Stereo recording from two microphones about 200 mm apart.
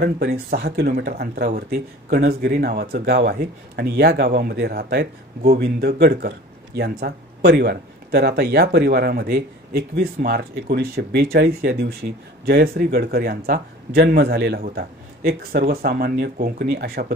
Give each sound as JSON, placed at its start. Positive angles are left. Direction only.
{"t": 0.0, "sound": "speech", "side_deg": -50}